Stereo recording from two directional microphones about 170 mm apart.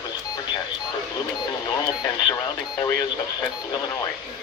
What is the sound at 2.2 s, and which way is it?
Radio, 20° left (ahead or behind).